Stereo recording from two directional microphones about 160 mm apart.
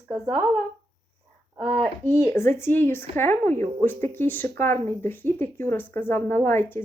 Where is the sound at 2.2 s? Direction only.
15° left (ahead or behind).